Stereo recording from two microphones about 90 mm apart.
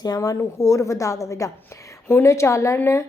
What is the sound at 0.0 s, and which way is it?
A woman's voice, 45° left (ahead or behind).